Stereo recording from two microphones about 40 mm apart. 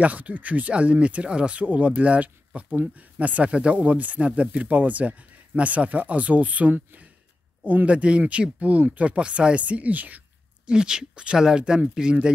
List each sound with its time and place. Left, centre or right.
0.0 s speech: right
7.9 s speech: right
10.7 s speech: centre